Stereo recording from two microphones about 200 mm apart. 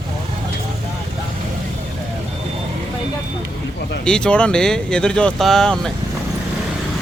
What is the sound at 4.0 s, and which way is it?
Speech, 5° left (ahead or behind).